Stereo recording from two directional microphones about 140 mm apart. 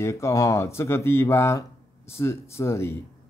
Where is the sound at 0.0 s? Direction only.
20° left (ahead or behind).